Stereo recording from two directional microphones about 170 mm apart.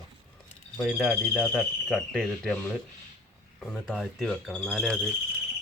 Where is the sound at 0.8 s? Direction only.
Centre (ahead or behind).